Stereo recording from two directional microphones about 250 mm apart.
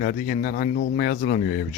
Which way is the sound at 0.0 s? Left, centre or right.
Left.